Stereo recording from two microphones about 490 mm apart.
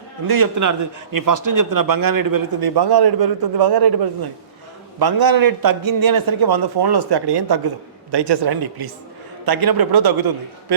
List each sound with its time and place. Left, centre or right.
0.3 s a man's voice: right